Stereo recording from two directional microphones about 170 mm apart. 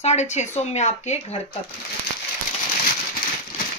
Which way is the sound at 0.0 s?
40° left (ahead or behind).